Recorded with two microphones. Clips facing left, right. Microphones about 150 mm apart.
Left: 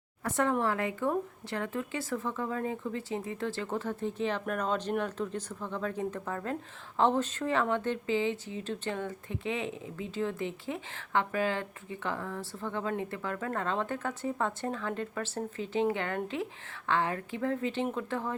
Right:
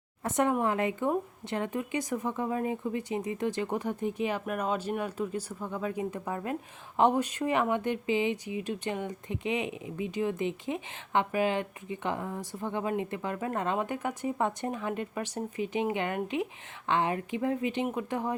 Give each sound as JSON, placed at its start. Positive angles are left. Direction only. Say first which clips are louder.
{"t": 0.3, "sound": "a woman's voice", "louder": "right 2 dB", "side_deg": -20}